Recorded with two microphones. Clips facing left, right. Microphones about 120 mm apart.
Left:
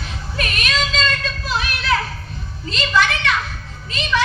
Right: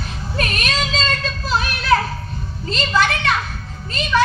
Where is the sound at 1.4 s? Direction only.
40° right (ahead or behind).